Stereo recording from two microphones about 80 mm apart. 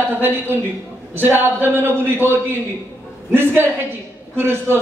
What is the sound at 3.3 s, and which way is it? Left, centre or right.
A man's voice, right.